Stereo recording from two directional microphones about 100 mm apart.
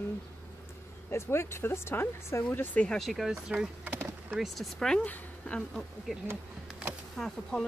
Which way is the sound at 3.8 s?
20° right (ahead or behind).